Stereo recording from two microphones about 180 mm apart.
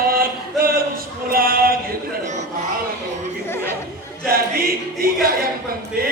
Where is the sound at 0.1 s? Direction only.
55° right (ahead or behind).